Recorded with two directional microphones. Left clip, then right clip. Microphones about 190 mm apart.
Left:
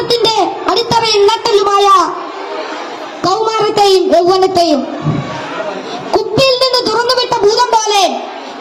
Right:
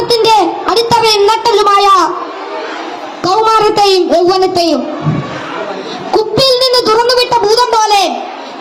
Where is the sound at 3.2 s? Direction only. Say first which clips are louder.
Right 4 dB; 15° right (ahead or behind).